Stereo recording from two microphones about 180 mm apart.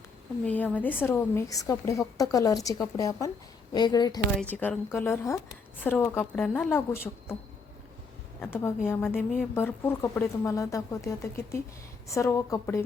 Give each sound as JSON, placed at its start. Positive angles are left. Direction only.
{"t": 0.4, "sound": "a woman's voice", "side_deg": 10}
{"t": 4.4, "sound": "speech", "side_deg": 10}
{"t": 8.9, "sound": "speech", "side_deg": 10}